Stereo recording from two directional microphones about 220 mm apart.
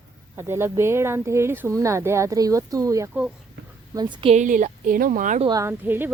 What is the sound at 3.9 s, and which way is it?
Speech, 20° right (ahead or behind).